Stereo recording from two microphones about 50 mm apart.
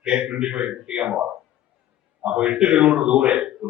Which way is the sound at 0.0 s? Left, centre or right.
Centre.